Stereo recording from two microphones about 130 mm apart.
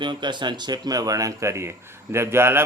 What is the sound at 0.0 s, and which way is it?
A man's voice, 35° right (ahead or behind).